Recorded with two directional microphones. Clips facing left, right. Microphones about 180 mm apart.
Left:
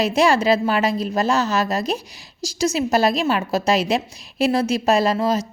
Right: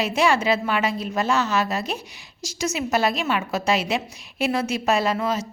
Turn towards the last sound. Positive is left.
turn(degrees=35)  # may be behind; listen again after turning